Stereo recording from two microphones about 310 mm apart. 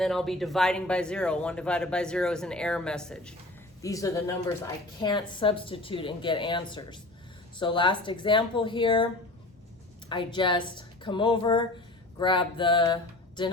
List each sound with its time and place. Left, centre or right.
0.0 s speech: centre
10.1 s speech: centre